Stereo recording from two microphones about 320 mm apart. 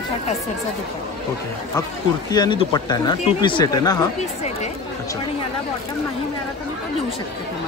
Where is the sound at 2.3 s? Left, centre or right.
Centre.